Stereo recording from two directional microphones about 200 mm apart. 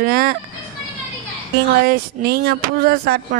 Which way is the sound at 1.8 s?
50° right (ahead or behind).